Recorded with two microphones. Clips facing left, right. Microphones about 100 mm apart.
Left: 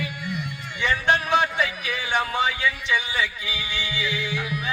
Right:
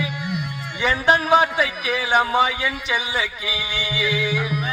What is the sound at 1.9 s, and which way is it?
Speech, 65° right (ahead or behind).